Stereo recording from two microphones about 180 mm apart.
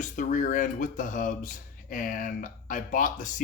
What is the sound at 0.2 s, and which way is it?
Speech, 45° left (ahead or behind).